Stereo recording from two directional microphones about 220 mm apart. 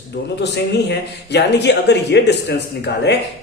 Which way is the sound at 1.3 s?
50° left (ahead or behind).